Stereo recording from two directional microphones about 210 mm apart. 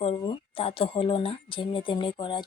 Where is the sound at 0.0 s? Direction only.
25° left (ahead or behind).